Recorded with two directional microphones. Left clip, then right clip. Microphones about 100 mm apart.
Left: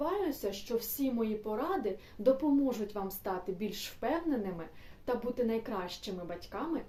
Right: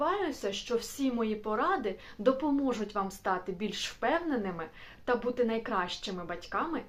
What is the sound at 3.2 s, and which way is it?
Speech, 30° left (ahead or behind).